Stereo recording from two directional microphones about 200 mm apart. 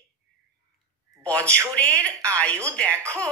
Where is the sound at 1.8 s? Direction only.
5° left (ahead or behind).